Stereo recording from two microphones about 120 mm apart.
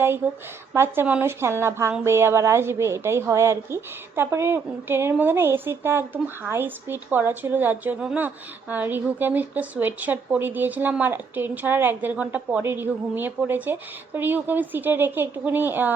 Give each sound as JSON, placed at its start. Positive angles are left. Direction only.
{"t": 0.7, "sound": "a woman's voice", "side_deg": -20}